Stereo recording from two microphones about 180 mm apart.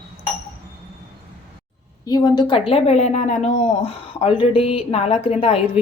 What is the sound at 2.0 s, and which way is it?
Speech, 25° left (ahead or behind).